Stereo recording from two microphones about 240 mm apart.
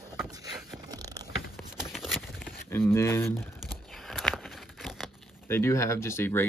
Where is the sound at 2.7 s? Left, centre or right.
Centre.